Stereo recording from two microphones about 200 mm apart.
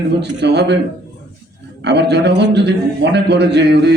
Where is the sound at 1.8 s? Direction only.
60° right (ahead or behind).